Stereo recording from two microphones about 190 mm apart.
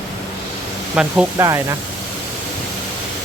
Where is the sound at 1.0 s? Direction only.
5° right (ahead or behind).